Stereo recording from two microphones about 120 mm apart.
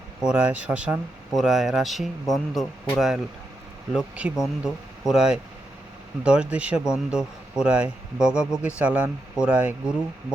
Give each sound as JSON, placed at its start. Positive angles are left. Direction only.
{"t": 0.2, "sound": "speech", "side_deg": -10}